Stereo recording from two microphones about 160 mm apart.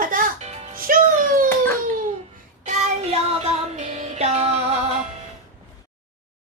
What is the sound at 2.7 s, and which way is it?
Child singing, 40° right (ahead or behind).